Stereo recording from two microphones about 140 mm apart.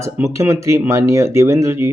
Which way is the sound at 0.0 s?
20° right (ahead or behind).